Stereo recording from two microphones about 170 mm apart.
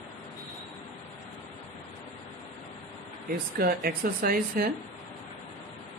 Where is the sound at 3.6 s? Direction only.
60° right (ahead or behind).